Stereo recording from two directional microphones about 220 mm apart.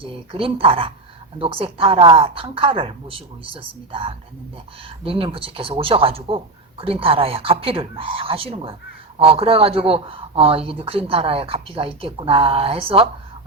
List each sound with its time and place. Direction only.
0.0 s speech: 25° right (ahead or behind)